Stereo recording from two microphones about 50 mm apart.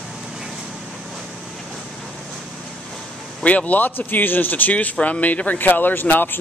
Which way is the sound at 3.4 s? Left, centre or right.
Left.